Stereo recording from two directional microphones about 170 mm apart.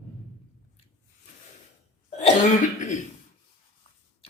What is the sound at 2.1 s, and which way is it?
Cough, 40° left (ahead or behind).